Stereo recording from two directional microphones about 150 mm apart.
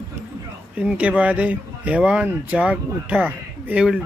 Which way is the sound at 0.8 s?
10° right (ahead or behind).